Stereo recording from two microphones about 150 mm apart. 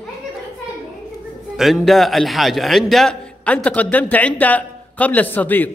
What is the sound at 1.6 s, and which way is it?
A man's voice, centre (ahead or behind).